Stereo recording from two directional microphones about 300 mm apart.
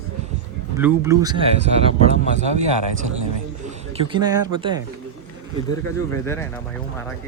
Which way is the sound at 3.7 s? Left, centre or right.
Centre.